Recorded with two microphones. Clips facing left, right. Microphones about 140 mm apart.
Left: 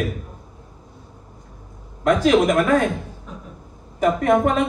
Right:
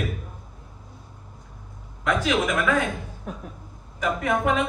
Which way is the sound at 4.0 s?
45° left (ahead or behind).